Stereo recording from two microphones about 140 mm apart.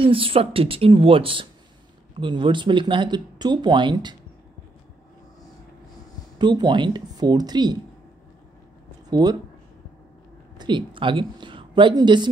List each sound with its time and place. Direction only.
0.0 s speech: 40° right (ahead or behind)
6.3 s speech: 30° right (ahead or behind)
9.1 s speech: 30° right (ahead or behind)
10.6 s a woman's voice: 35° right (ahead or behind)